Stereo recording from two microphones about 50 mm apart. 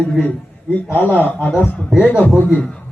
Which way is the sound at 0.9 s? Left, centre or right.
Left.